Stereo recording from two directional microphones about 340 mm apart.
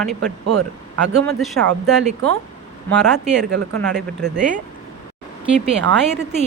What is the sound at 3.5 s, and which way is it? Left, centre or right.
Speech, right.